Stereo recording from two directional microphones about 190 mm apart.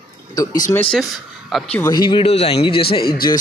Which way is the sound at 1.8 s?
20° left (ahead or behind).